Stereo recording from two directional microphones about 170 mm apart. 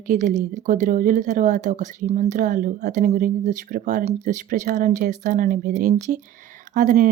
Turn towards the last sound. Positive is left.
turn(degrees=-55)  # may be behind; listen again after turning